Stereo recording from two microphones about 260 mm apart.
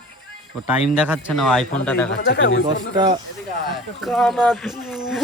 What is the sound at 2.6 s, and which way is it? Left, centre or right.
Speech, centre.